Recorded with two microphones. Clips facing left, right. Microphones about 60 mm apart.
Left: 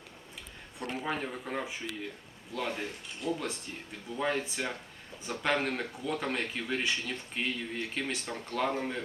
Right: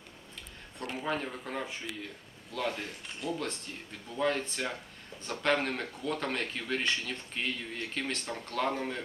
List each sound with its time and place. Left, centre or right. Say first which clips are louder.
0.8 s speech: even; centre
3.2 s speech: left 2 dB; left
4.2 s speech: right 1 dB; centre